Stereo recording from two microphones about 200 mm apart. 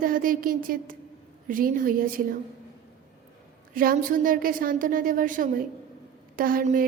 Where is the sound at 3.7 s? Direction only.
45° right (ahead or behind).